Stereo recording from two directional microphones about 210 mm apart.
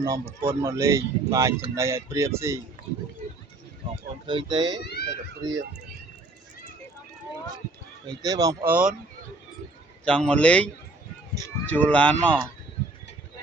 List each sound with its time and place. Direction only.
0.0 s speech: 15° right (ahead or behind)
4.3 s speech: 20° right (ahead or behind)
4.8 s speech: 50° left (ahead or behind)
5.0 s a sound: 20° right (ahead or behind)
8.0 s speech: 15° right (ahead or behind)
10.1 s speech: 5° left (ahead or behind)